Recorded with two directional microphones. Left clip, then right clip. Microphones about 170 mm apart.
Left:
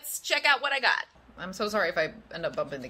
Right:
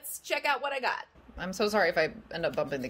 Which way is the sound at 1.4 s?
20° right (ahead or behind).